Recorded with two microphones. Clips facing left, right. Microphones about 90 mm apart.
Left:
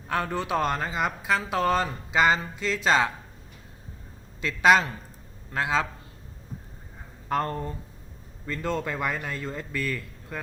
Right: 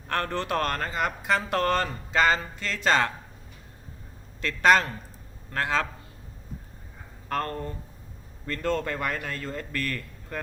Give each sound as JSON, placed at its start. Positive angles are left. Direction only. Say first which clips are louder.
{"t": 0.1, "sound": "speech", "louder": "left 1 dB", "side_deg": 10}
{"t": 4.4, "sound": "speech", "louder": "left 1 dB", "side_deg": 10}
{"t": 7.3, "sound": "speech", "louder": "left 2 dB", "side_deg": 15}